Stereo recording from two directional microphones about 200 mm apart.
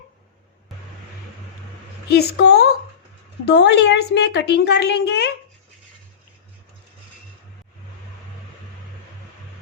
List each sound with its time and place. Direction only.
2.0 s a woman's voice: 55° left (ahead or behind)